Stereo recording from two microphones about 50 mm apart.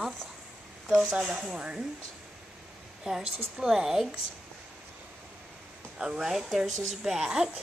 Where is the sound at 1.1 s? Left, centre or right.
Centre.